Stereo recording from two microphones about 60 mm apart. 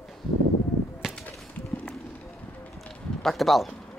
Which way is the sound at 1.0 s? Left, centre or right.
Centre.